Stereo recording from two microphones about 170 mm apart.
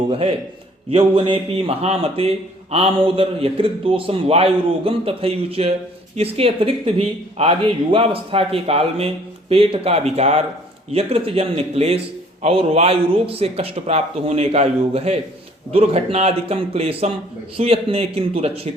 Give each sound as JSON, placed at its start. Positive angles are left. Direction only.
{"t": 0.1, "sound": "speech", "side_deg": -35}